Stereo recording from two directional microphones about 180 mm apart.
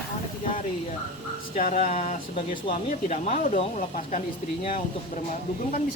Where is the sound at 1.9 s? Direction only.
35° left (ahead or behind).